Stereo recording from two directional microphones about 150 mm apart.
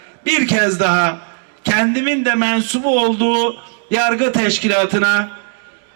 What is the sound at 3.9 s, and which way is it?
Speech, 20° left (ahead or behind).